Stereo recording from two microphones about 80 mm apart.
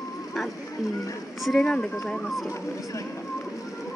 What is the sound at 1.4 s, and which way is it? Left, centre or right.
Speech, centre.